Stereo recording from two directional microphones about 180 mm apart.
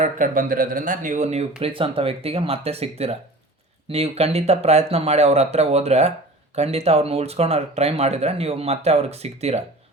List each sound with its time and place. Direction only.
0.0 s speech: 45° right (ahead or behind)